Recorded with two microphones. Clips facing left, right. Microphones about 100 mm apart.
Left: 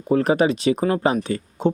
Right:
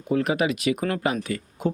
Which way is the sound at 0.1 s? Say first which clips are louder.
Left 5 dB; 35° left (ahead or behind).